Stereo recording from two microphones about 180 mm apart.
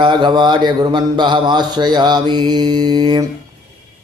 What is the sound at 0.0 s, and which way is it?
A man's voice, 25° right (ahead or behind).